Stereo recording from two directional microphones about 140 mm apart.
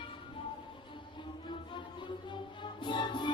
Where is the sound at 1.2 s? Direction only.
35° left (ahead or behind).